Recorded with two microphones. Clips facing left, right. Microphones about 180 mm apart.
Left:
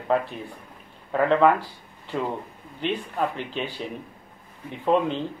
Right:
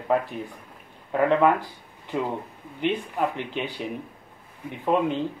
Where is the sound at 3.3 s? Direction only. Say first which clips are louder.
Even; 15° right (ahead or behind).